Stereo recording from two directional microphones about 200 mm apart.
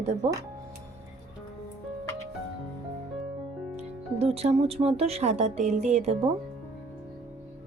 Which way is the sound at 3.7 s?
30° right (ahead or behind).